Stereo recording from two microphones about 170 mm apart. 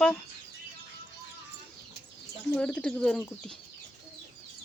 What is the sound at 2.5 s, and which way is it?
A woman's voice, 5° left (ahead or behind).